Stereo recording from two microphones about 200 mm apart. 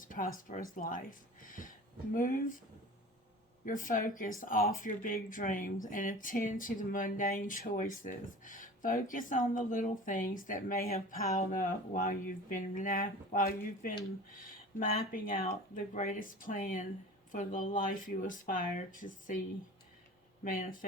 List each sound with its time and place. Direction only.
0.0 s a sound: 40° left (ahead or behind)
0.3 s speech: 40° left (ahead or behind)
3.7 s speech: 40° left (ahead or behind)
20.4 s speech: 45° left (ahead or behind)